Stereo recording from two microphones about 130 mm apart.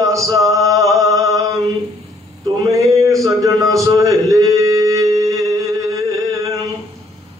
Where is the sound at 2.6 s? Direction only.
25° right (ahead or behind).